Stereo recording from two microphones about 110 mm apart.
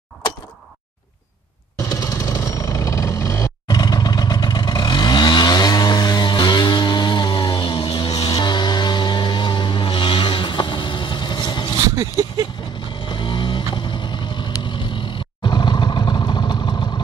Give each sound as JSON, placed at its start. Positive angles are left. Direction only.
{"t": 2.0, "sound": "vehicle", "side_deg": 30}
{"t": 3.6, "sound": "vehicle", "side_deg": 35}
{"t": 8.3, "sound": "music", "side_deg": 40}
{"t": 11.9, "sound": "a sound", "side_deg": -30}
{"t": 13.0, "sound": "vehicle", "side_deg": 45}